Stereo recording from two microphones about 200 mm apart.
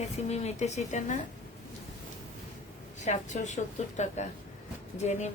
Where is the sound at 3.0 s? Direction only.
35° left (ahead or behind).